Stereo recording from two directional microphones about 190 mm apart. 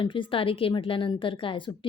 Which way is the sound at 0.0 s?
25° left (ahead or behind).